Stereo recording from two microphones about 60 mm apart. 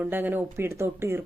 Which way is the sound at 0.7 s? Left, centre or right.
Right.